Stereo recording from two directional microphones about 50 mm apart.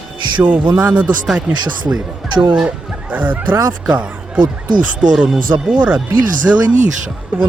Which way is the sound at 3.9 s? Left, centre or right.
Right.